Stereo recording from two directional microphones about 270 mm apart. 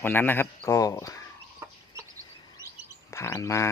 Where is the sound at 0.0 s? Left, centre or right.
Centre.